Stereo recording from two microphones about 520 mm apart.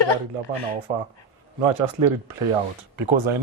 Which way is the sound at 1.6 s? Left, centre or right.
Right.